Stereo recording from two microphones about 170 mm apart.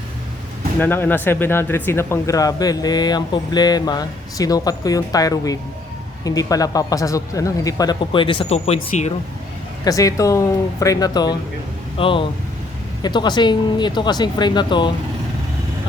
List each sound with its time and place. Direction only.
0.8 s speech: 10° left (ahead or behind); by 9.1 s 40° left (ahead or behind)
9.8 s speech: 20° left (ahead or behind)